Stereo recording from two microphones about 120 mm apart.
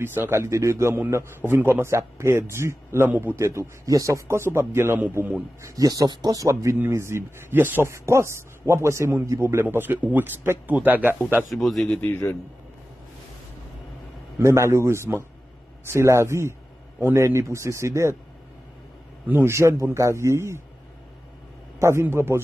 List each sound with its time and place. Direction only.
0.0 s speech: 20° right (ahead or behind)
5.8 s speech: 30° right (ahead or behind); by 11.1 s 15° right (ahead or behind)
11.5 s a man's voice: centre (ahead or behind)
11.9 s a man's voice: 15° left (ahead or behind)
14.4 s speech: 25° right (ahead or behind)
19.2 s speech: 20° right (ahead or behind)
21.7 s speech: 20° right (ahead or behind)